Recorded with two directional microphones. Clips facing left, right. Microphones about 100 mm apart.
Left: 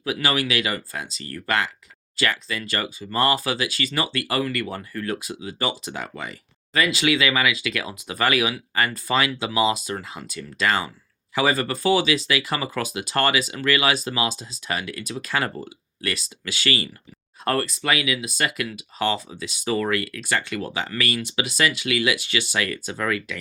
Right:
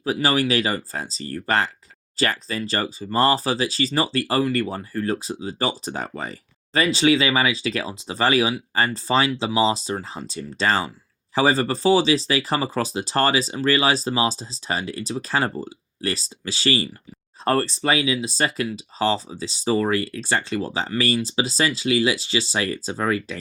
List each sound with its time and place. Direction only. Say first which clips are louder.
0.0 s speech: right 3 dB; 35° right (ahead or behind)